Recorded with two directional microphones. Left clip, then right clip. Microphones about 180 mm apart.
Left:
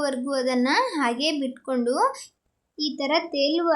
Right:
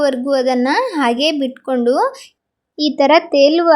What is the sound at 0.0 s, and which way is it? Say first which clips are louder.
Speech: right 10 dB; 25° right (ahead or behind).